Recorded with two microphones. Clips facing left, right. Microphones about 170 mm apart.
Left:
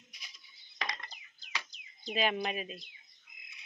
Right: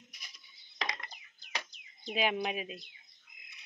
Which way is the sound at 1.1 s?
50° right (ahead or behind).